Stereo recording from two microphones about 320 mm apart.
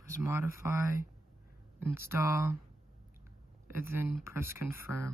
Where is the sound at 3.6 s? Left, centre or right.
Centre.